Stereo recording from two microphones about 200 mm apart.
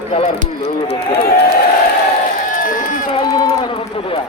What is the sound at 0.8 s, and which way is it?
Speech, 55° left (ahead or behind).